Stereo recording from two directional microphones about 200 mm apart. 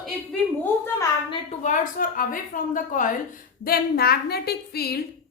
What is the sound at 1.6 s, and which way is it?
A woman's voice, 40° left (ahead or behind).